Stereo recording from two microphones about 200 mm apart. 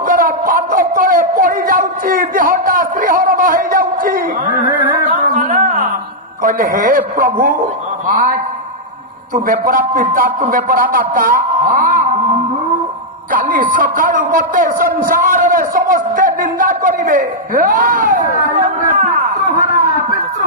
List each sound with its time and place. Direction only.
0.0 s a sound: 45° right (ahead or behind)
6.4 s a man's voice: 45° right (ahead or behind)
13.3 s a man's voice: 45° right (ahead or behind)